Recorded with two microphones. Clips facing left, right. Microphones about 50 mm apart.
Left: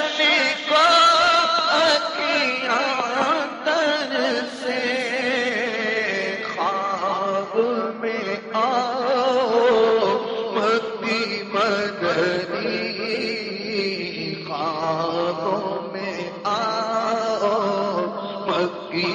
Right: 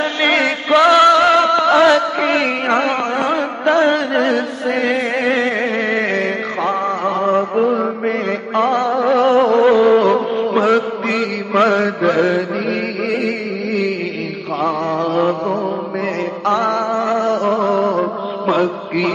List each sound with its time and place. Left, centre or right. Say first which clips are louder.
0.0 s music: right 4 dB; right
14.6 s a sound: right 5 dB; right
15.4 s mantra: right 4 dB; centre
16.4 s music: right 6 dB; right
18.5 s mantra: right 6 dB; right